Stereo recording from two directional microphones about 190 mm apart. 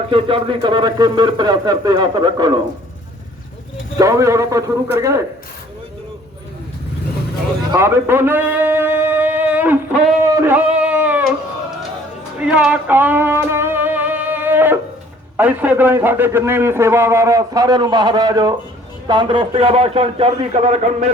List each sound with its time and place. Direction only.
0.1 s speech: 30° right (ahead or behind)
3.9 s a man's voice: 15° right (ahead or behind)
7.7 s speech: 15° right (ahead or behind)
10.3 s a sound: 10° right (ahead or behind)
12.5 s music: 5° right (ahead or behind)
15.4 s a man's voice: 10° right (ahead or behind); by 21.1 s 35° right (ahead or behind)